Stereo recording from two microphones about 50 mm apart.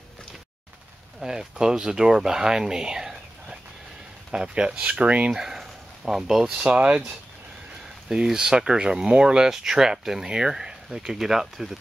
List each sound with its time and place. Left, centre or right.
1.2 s speech: centre
5.3 s speech: centre
6.7 s speech: right
8.1 s speech: centre